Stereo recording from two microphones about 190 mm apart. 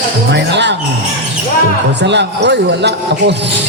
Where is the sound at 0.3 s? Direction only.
65° right (ahead or behind).